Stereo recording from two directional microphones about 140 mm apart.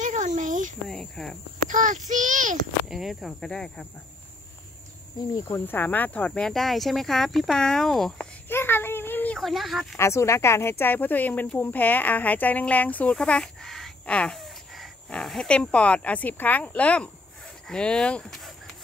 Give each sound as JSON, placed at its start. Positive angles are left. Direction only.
{"t": 0.0, "sound": "a sound", "side_deg": -65}
{"t": 0.8, "sound": "speech", "side_deg": 5}
{"t": 1.7, "sound": "a child's voice", "side_deg": -65}
{"t": 2.9, "sound": "speech", "side_deg": 0}
{"t": 5.5, "sound": "speech", "side_deg": 15}
{"t": 8.5, "sound": "a sound", "side_deg": 15}
{"t": 9.4, "sound": "speech", "side_deg": 0}
{"t": 9.9, "sound": "speech", "side_deg": 20}